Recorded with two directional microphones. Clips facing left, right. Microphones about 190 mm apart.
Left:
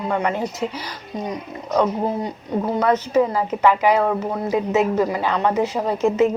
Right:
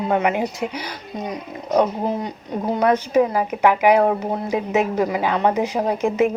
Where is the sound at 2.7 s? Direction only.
15° right (ahead or behind).